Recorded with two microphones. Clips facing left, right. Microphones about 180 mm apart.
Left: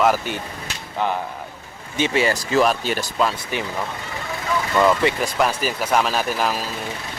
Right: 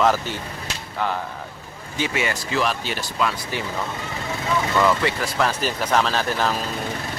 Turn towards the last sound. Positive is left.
turn(degrees=10)  # may be behind; listen again after turning